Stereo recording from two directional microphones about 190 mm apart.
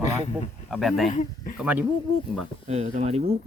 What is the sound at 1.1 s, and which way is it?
Speech, 40° left (ahead or behind).